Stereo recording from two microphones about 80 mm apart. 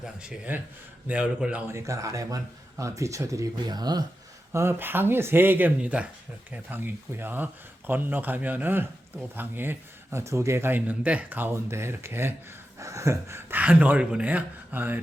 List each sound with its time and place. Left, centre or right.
0.0 s speech: centre
1.6 s speech: right
4.5 s speech: right
12.8 s a sound: right
13.6 s speech: centre